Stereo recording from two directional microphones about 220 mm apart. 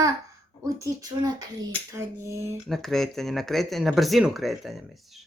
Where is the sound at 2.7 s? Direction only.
Centre (ahead or behind).